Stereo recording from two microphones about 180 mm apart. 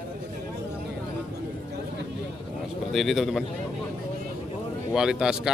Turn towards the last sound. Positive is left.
turn(degrees=-5)  # may be behind; listen again after turning